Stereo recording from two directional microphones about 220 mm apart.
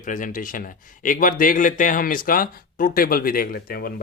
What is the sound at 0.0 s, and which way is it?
Speech, 35° left (ahead or behind).